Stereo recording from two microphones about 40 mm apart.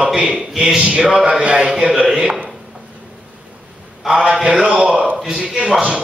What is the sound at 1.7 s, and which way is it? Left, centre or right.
Speech, centre.